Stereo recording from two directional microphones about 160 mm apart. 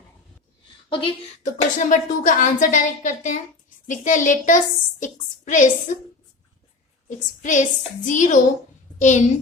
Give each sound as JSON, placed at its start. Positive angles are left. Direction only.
{"t": 0.9, "sound": "speech", "side_deg": 30}
{"t": 1.5, "sound": "a woman's voice", "side_deg": 50}
{"t": 7.4, "sound": "a woman's voice", "side_deg": 50}